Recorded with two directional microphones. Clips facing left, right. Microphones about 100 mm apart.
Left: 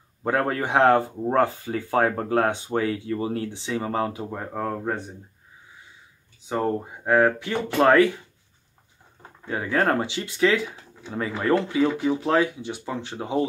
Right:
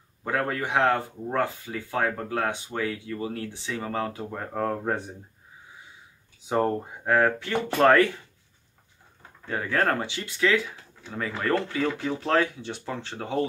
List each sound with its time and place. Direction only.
0.2 s speech: 30° left (ahead or behind)
4.2 s speech: 10° left (ahead or behind)
6.5 s speech: centre (ahead or behind)
9.4 s speech: 15° left (ahead or behind)